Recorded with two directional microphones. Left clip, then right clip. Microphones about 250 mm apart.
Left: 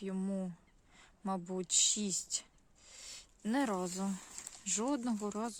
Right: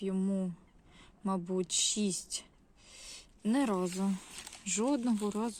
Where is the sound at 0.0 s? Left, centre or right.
Centre.